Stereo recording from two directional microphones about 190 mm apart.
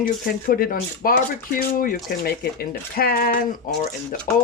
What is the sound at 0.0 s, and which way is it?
Speech, 50° left (ahead or behind).